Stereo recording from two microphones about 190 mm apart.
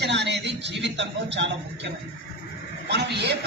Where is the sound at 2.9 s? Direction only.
60° right (ahead or behind).